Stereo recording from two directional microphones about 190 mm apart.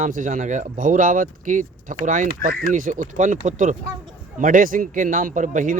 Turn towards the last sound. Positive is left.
turn(degrees=-45)  # may be behind; listen again after turning